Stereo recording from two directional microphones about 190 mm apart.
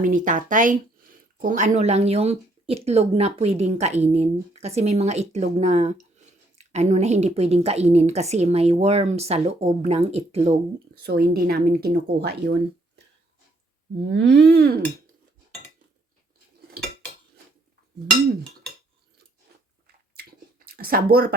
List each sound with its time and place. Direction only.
0.0 s speech: 45° right (ahead or behind)
11.0 s speech: 55° right (ahead or behind)
14.0 s speech: 65° right (ahead or behind)
20.7 s speech: 50° right (ahead or behind)